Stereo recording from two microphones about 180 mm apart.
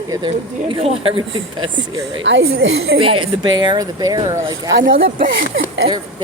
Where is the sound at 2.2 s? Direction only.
90° right.